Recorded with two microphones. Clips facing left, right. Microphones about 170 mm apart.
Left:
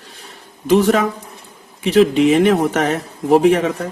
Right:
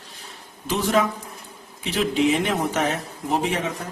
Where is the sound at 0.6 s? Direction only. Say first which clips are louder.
Left 8 dB; 60° left (ahead or behind).